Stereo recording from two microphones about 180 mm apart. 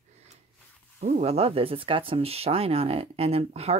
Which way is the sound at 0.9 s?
40° right (ahead or behind).